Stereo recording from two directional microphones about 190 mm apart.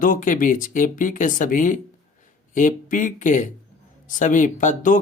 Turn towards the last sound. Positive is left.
turn(degrees=40)  # may be behind; listen again after turning